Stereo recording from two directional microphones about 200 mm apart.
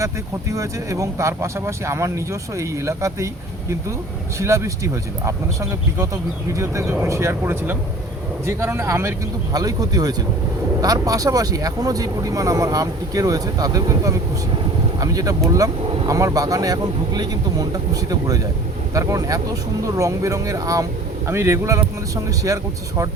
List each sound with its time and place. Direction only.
0.5 s speech: 15° right (ahead or behind)
4.4 s speech: 15° right (ahead or behind)
18.9 s speech: 15° right (ahead or behind)